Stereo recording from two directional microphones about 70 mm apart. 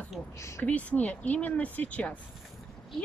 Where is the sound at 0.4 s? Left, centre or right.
Left.